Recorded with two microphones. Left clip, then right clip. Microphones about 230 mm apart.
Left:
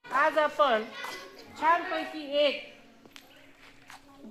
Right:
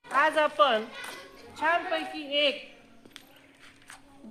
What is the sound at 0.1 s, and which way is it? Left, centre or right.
Speech, right.